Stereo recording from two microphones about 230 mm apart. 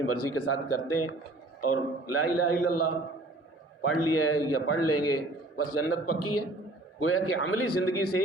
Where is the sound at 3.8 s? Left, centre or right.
Left.